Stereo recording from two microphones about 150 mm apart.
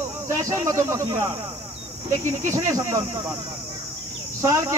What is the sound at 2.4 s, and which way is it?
Speech, 20° right (ahead or behind).